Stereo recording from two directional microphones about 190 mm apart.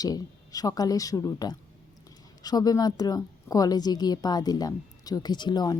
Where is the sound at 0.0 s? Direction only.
20° left (ahead or behind).